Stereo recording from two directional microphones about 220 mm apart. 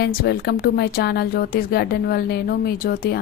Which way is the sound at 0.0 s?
45° left (ahead or behind).